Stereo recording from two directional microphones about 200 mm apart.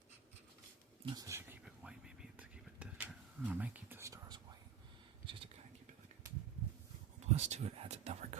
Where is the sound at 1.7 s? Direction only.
5° right (ahead or behind).